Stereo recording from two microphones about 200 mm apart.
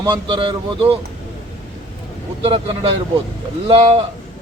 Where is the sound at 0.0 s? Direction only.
25° right (ahead or behind).